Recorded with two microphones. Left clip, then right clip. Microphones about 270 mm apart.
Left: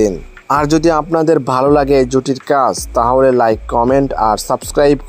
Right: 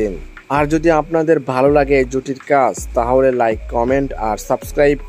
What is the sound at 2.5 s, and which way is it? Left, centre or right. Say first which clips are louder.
Speech: left 1 dB; centre.